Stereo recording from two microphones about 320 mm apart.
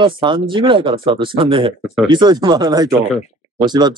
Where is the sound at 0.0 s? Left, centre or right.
Centre.